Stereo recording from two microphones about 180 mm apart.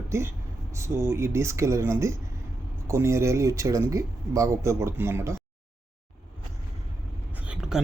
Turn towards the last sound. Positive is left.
turn(degrees=-5)  # may be behind; listen again after turning